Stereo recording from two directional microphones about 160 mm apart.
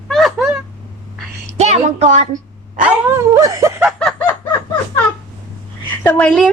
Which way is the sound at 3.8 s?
Centre (ahead or behind).